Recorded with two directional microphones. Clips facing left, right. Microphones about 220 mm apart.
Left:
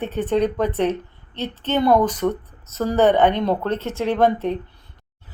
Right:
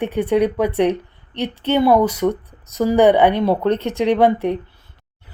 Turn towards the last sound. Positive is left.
turn(degrees=-10)  # may be behind; listen again after turning